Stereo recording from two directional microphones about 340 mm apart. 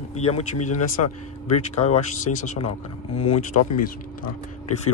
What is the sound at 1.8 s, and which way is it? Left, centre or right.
Speech, centre.